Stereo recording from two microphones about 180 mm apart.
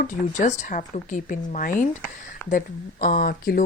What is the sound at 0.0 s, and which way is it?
Speech, 45° left (ahead or behind).